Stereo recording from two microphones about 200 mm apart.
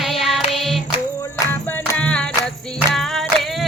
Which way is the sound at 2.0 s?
5° left (ahead or behind).